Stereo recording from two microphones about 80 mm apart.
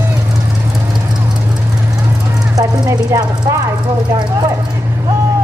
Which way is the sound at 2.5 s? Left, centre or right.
Right.